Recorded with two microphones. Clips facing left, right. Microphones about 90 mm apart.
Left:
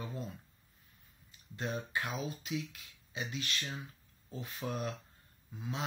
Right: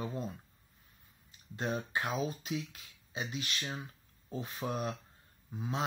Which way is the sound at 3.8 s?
25° right (ahead or behind).